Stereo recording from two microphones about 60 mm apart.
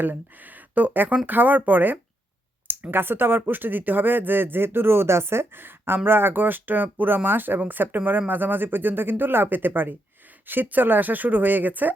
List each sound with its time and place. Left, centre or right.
0.0 s speech: right